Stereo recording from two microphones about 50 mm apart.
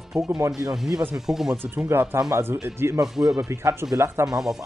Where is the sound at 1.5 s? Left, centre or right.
Right.